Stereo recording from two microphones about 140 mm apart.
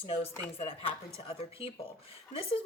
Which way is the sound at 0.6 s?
40° left (ahead or behind).